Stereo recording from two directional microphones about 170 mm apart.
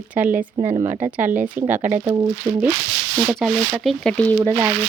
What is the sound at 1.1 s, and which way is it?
Speech, 10° right (ahead or behind).